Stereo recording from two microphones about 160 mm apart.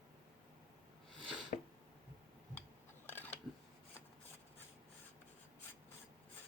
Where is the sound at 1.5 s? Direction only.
60° left (ahead or behind).